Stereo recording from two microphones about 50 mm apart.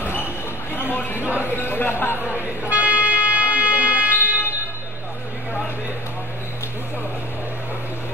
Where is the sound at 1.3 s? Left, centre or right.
Right.